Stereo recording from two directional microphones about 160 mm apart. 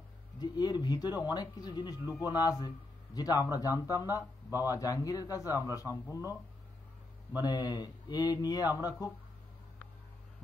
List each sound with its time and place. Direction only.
0.4 s speech: 25° left (ahead or behind)
7.4 s speech: 25° left (ahead or behind)